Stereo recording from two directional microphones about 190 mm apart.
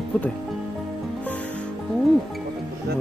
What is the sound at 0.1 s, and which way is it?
Speech, 5° left (ahead or behind).